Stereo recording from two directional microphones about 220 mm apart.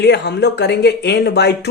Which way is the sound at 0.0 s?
50° left (ahead or behind).